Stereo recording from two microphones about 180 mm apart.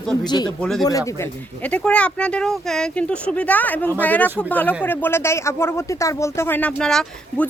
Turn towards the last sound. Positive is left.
turn(degrees=5)  # may be behind; listen again after turning